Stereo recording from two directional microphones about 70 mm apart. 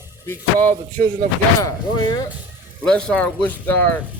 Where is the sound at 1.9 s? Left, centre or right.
Left.